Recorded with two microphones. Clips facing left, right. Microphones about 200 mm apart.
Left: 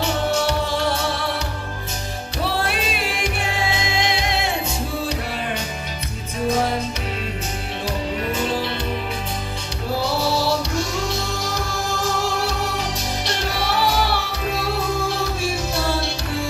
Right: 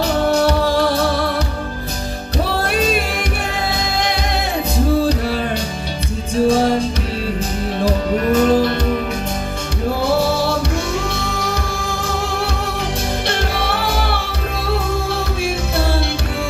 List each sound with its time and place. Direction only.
0.0 s music: 35° right (ahead or behind)
3.6 s music: 40° right (ahead or behind)
6.4 s music: 30° right (ahead or behind); by 8.7 s 45° right (ahead or behind)
11.1 s music: 60° right (ahead or behind)